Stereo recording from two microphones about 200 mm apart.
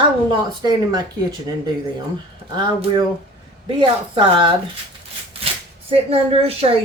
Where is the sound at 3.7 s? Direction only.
25° right (ahead or behind).